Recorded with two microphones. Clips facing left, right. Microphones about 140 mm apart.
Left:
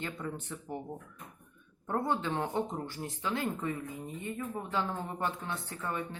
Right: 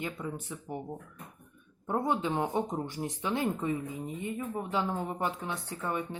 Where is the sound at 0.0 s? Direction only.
10° right (ahead or behind).